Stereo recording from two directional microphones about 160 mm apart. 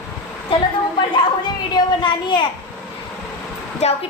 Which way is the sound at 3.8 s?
40° left (ahead or behind).